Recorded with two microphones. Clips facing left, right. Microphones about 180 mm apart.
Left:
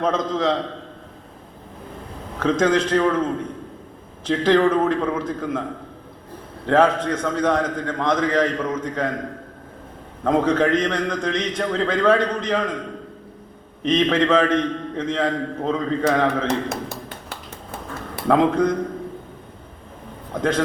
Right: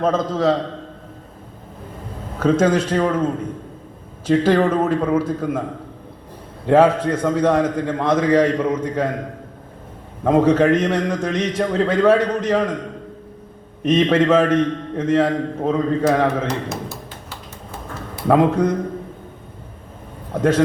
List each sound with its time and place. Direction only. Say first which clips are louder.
0.0 s a man's voice: right 3 dB; 5° right (ahead or behind)
2.4 s a man's voice: right 2 dB; 5° right (ahead or behind)
4.3 s a man's voice: right 1 dB; 5° right (ahead or behind)
6.7 s a man's voice: right 3 dB; 10° right (ahead or behind)
10.2 s a man's voice: right 4 dB; 10° right (ahead or behind)
13.8 s a man's voice: right 3 dB; 5° right (ahead or behind)
16.6 s tap: even; 55° left (ahead or behind)
18.3 s a man's voice: right 2 dB; 5° right (ahead or behind)
20.3 s a man's voice: right 4 dB; 5° right (ahead or behind)